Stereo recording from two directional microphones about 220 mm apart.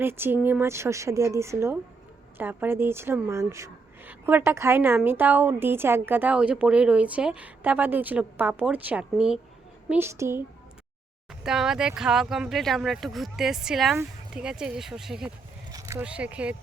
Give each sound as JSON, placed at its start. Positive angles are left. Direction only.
{"t": 0.0, "sound": "speech", "side_deg": -10}
{"t": 11.4, "sound": "speech", "side_deg": 0}